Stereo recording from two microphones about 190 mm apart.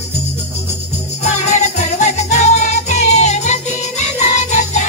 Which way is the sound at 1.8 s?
40° left (ahead or behind).